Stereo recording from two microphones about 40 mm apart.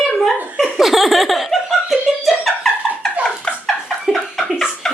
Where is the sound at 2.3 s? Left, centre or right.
Centre.